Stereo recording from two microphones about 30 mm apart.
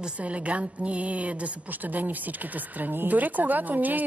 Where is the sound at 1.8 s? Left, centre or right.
Right.